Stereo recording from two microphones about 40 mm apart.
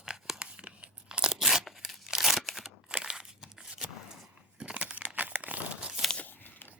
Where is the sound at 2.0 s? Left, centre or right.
Centre.